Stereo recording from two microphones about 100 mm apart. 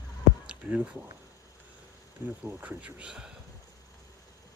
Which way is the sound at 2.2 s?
15° right (ahead or behind).